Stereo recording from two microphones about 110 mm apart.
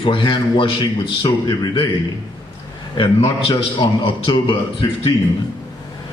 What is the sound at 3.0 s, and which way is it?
Mantra, 50° left (ahead or behind).